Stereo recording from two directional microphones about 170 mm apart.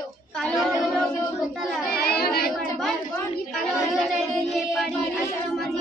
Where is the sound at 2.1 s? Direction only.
65° left (ahead or behind).